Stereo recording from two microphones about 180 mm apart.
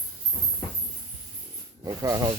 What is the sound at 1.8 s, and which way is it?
Speech, 20° right (ahead or behind).